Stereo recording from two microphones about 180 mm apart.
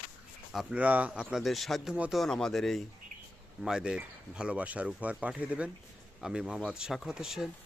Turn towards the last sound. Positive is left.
turn(degrees=-5)  # may be behind; listen again after turning